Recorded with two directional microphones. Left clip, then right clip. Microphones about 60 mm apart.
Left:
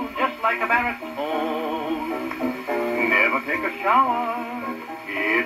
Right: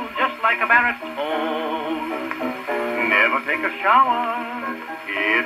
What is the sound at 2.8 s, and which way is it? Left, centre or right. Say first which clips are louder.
Music: right 2 dB; left.